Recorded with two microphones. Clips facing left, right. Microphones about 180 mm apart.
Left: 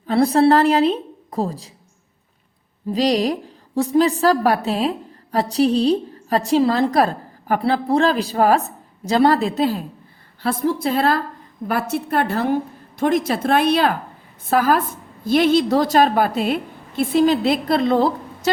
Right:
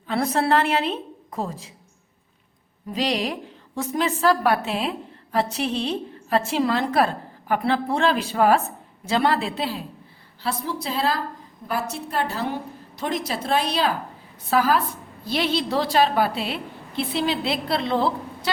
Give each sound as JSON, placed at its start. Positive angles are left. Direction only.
{"t": 0.1, "sound": "a woman's voice", "side_deg": 35}
{"t": 2.9, "sound": "a woman's voice", "side_deg": 35}